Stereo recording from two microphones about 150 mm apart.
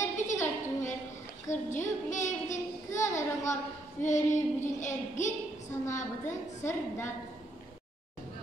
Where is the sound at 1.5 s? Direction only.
55° left (ahead or behind).